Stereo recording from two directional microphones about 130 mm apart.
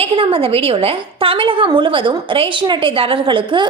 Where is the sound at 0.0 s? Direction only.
45° right (ahead or behind).